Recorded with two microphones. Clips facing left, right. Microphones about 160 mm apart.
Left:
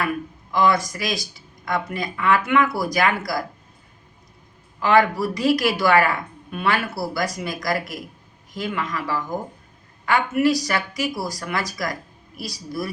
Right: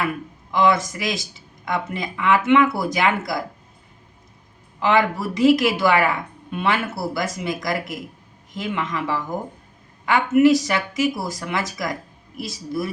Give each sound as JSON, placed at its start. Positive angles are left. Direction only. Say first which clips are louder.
{"t": 0.5, "sound": "speech", "louder": "right 1 dB", "side_deg": -20}
{"t": 4.8, "sound": "speech", "louder": "left 1 dB", "side_deg": -20}